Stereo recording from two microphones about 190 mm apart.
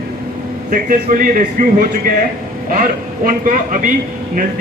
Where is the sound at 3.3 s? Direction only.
45° right (ahead or behind).